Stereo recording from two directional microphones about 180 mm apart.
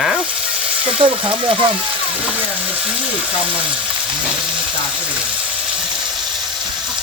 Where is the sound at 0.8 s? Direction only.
30° right (ahead or behind).